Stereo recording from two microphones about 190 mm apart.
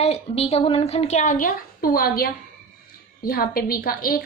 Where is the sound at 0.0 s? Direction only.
35° left (ahead or behind).